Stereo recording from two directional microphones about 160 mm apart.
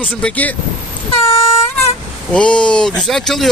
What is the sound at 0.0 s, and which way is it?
Speech, 5° left (ahead or behind).